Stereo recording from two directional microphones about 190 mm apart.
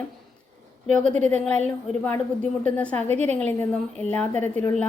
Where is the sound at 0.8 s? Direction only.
40° right (ahead or behind).